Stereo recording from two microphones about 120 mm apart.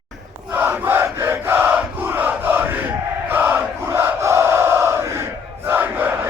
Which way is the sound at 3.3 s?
15° right (ahead or behind).